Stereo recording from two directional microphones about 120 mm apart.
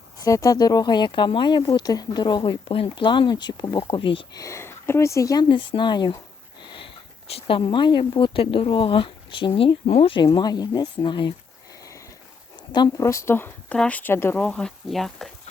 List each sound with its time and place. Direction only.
0.3 s speech: 30° left (ahead or behind); by 4.3 s 45° left (ahead or behind)
4.4 s speech: 25° left (ahead or behind); by 6.1 s 40° left (ahead or behind)
6.6 s sniff: 45° left (ahead or behind)
7.3 s speech: 45° left (ahead or behind)
9.8 s speech: 70° left (ahead or behind)
10.1 s speech: 40° left (ahead or behind)
12.7 s speech: 40° left (ahead or behind)
13.1 s speech: 20° left (ahead or behind)
14.4 s speech: 5° left (ahead or behind)